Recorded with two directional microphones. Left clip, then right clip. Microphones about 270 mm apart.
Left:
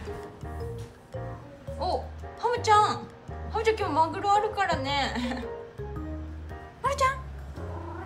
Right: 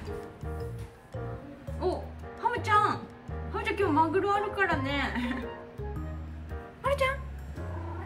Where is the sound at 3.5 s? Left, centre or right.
Centre.